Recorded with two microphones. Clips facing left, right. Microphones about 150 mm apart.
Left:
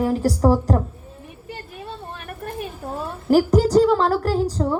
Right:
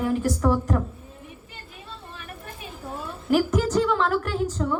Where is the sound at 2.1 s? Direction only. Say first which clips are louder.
Left 8 dB; 55° left (ahead or behind).